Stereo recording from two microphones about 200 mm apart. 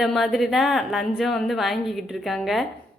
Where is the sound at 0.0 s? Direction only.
Centre (ahead or behind).